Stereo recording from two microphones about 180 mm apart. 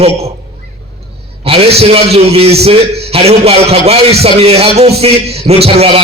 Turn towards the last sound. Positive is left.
turn(degrees=-35)  # may be behind; listen again after turning